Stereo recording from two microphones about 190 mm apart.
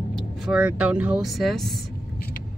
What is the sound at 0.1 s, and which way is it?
Speech, centre (ahead or behind).